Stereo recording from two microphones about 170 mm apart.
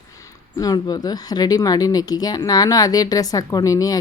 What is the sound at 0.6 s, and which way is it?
A woman's voice, 25° left (ahead or behind).